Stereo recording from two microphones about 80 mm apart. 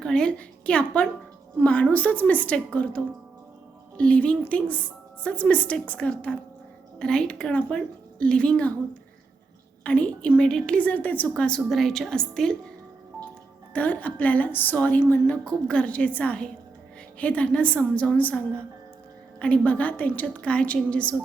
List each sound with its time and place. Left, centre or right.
0.0 s a woman's voice: centre
9.8 s a woman's voice: centre
13.7 s a woman's voice: centre